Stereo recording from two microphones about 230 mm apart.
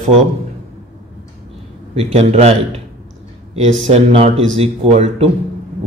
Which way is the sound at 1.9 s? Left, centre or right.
Right.